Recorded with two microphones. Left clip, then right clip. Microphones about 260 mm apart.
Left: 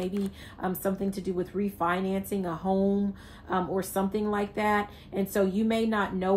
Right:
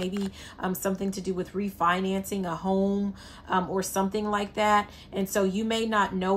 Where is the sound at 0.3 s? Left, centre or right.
Right.